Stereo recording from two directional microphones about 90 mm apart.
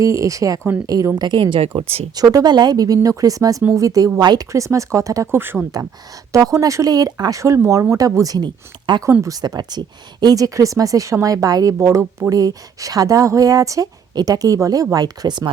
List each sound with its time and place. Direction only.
0.0 s a woman's voice: 35° right (ahead or behind); by 2.0 s 90° right
2.1 s speech: 50° right (ahead or behind)
4.2 s speech: 50° right (ahead or behind)
4.5 s speech: 35° right (ahead or behind)
5.3 s speech: 25° right (ahead or behind)
6.3 s speech: 40° right (ahead or behind)
8.9 s a woman's voice: 65° right (ahead or behind)
9.2 s speech: 40° right (ahead or behind)
11.8 s speech: 30° right (ahead or behind)
12.3 s speech: 45° right (ahead or behind)